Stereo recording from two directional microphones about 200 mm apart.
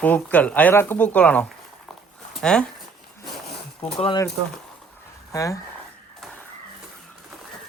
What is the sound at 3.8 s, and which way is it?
Speech, 25° left (ahead or behind).